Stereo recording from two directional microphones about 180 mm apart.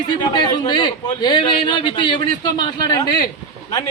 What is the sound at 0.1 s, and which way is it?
A man's voice, 25° left (ahead or behind).